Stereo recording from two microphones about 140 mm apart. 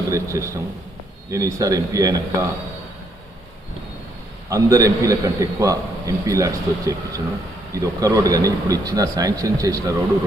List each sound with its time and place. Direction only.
0.1 s a man's voice: 20° right (ahead or behind)
4.4 s a man's voice: 25° right (ahead or behind)